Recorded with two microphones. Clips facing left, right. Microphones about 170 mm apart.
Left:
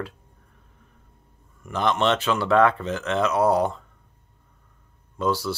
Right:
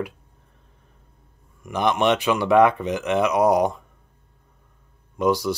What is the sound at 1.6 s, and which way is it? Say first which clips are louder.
Speech: right 2 dB; 15° right (ahead or behind).